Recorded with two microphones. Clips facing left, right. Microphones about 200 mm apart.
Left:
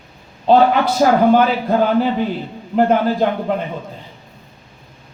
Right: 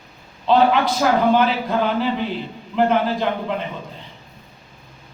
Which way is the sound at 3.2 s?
45° left (ahead or behind).